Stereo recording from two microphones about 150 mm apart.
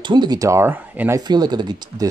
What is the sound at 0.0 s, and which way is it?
Speech, 30° right (ahead or behind).